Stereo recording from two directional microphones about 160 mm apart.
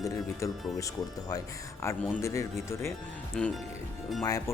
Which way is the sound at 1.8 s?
20° left (ahead or behind).